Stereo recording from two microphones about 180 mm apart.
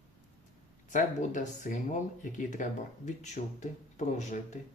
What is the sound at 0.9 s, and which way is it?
Speech, 45° left (ahead or behind).